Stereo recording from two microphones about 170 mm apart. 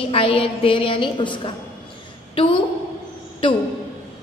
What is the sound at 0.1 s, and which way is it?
A woman's voice, 35° left (ahead or behind).